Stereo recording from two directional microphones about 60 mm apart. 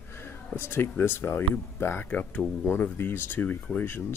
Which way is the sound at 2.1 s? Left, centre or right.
Left.